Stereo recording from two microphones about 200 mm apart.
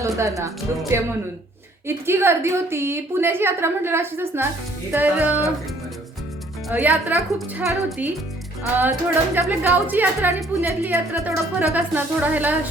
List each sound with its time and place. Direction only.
0.0 s a woman's voice: 15° right (ahead or behind)
6.7 s a woman's voice: 10° right (ahead or behind)